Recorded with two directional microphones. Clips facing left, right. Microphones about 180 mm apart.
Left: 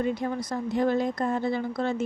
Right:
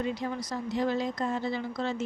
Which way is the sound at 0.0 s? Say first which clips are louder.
Left 4 dB; 50° left (ahead or behind).